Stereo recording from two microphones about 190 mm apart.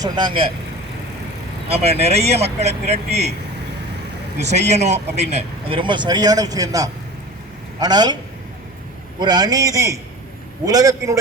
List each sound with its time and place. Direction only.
0.0 s speech: 25° right (ahead or behind)
1.7 s speech: 30° right (ahead or behind)
4.4 s a man's voice: 35° right (ahead or behind); by 11.2 s 15° right (ahead or behind)